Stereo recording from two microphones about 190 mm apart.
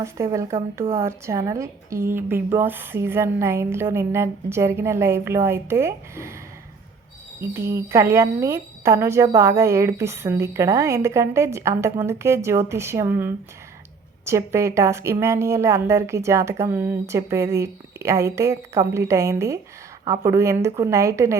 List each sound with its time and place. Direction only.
0.0 s speech: 15° right (ahead or behind)
7.4 s speech: 15° right (ahead or behind)